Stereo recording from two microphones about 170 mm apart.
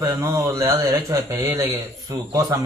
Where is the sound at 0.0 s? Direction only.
20° right (ahead or behind).